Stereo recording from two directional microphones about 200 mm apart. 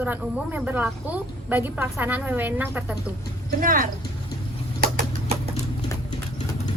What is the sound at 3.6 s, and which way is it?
Speech, 45° right (ahead or behind).